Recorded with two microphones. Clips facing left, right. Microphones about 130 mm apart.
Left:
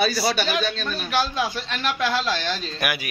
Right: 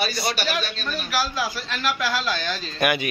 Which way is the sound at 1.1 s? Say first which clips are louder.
Left 3 dB; 25° left (ahead or behind).